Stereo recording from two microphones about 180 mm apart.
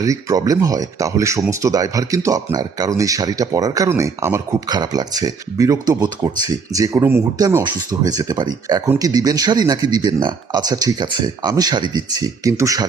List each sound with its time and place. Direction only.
0.0 s speech: 20° right (ahead or behind)